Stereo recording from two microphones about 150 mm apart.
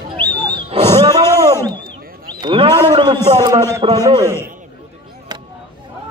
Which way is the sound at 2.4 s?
30° right (ahead or behind).